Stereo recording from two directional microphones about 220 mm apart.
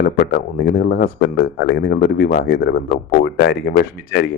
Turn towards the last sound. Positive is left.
turn(degrees=45)  # may be behind; listen again after turning